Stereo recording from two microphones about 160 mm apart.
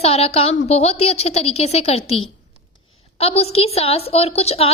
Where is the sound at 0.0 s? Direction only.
40° left (ahead or behind).